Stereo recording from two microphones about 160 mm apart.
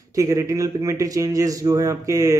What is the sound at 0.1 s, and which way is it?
A man's voice, 20° right (ahead or behind).